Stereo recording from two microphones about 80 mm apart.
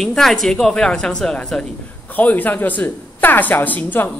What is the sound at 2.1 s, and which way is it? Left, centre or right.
A woman's voice, left.